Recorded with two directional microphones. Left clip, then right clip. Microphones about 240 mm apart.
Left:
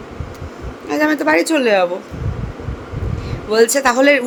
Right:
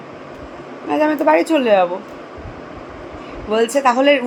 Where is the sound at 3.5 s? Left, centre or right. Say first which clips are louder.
Left 2 dB; centre.